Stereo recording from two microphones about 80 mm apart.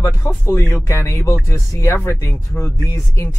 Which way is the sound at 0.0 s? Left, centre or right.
Left.